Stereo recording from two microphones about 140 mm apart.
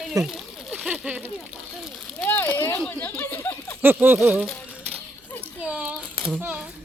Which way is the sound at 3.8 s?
15° right (ahead or behind).